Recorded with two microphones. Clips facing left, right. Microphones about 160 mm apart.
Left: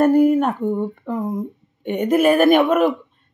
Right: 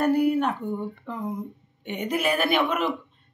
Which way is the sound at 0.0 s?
45° left (ahead or behind).